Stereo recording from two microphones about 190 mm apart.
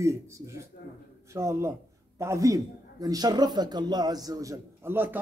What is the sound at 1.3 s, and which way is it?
A man's voice, 15° right (ahead or behind).